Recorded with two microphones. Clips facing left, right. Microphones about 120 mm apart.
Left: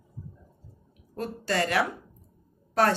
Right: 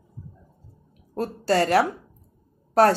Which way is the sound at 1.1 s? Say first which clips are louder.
Right 6 dB; 35° right (ahead or behind).